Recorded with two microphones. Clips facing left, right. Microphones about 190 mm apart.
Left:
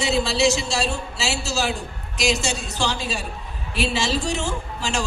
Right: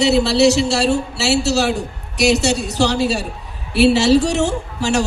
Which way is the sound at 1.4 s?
40° right (ahead or behind).